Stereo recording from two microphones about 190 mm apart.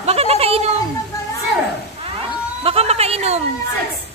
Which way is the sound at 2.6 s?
30° right (ahead or behind).